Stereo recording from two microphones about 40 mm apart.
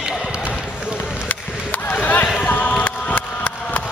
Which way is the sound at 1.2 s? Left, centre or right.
Left.